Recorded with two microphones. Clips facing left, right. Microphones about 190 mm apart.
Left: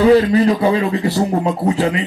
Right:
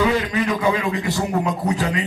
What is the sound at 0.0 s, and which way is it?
A man's voice, 40° left (ahead or behind).